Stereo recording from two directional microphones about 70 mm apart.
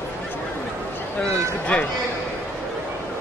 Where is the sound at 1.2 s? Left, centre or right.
Centre.